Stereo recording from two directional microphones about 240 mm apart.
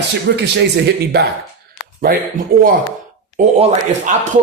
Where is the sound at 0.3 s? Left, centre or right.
Right.